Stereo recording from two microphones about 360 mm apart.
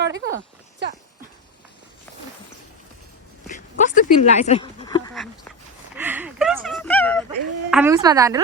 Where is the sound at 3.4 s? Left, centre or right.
Left.